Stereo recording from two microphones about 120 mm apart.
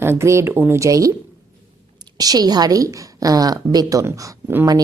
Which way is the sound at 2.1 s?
35° right (ahead or behind).